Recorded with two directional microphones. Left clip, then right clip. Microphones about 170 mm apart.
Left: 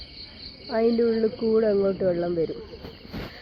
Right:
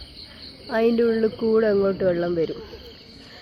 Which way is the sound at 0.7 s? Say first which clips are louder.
Right 2 dB; 25° right (ahead or behind).